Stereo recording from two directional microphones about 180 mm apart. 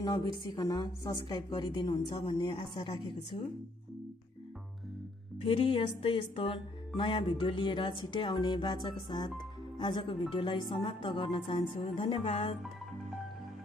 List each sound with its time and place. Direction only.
0.0 s speech: 25° left (ahead or behind)
5.4 s a woman's voice: 30° left (ahead or behind)